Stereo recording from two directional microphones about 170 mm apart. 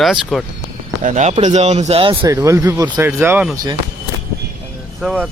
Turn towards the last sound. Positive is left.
turn(degrees=-5)  # may be behind; listen again after turning